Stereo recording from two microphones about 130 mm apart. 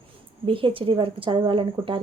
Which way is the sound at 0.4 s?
45° right (ahead or behind).